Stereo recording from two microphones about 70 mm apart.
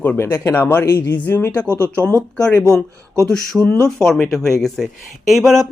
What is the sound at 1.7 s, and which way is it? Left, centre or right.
Speech, right.